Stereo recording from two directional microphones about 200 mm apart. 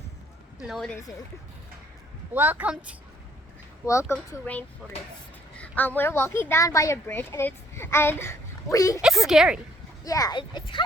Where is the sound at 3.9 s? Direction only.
15° left (ahead or behind).